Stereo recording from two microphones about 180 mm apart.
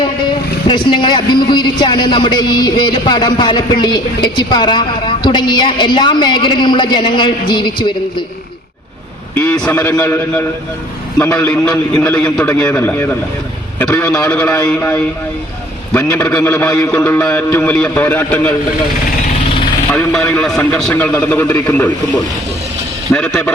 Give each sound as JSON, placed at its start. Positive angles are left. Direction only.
{"t": 0.0, "sound": "speech", "side_deg": 25}
{"t": 9.3, "sound": "a man's voice", "side_deg": 10}
{"t": 19.9, "sound": "a man's voice", "side_deg": 5}
{"t": 23.1, "sound": "speech", "side_deg": 5}